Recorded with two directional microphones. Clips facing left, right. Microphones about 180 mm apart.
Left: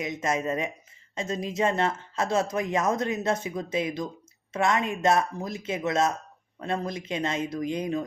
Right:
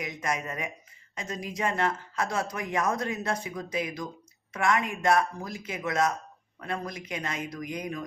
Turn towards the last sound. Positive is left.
turn(degrees=25)  # may be behind; listen again after turning